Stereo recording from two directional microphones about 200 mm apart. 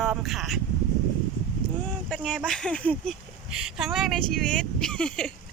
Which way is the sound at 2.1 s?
5° left (ahead or behind).